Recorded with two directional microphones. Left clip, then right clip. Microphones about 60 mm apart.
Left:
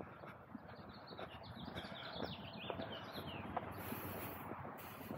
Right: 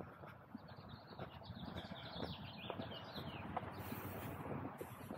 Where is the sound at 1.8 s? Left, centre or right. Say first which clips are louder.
Left 3 dB; centre.